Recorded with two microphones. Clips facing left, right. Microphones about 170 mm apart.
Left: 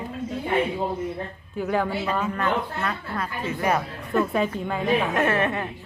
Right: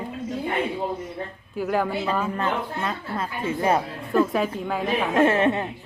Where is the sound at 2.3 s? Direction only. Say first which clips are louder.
Left 1 dB; 25° right (ahead or behind).